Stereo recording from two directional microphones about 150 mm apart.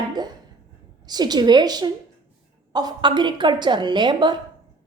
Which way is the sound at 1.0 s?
25° right (ahead or behind).